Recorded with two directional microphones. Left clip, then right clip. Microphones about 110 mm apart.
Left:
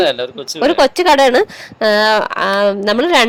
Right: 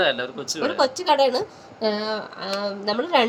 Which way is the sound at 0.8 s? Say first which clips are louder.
Left 8 dB; 60° left (ahead or behind).